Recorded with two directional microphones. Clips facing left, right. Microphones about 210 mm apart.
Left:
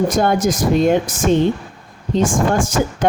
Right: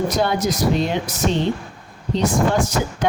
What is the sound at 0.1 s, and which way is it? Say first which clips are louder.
Speech: left 4 dB; 50° left (ahead or behind).